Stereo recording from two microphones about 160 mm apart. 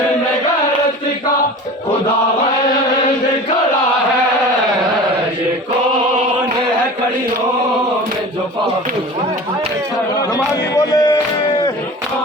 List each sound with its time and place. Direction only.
10.3 s speech: 20° left (ahead or behind)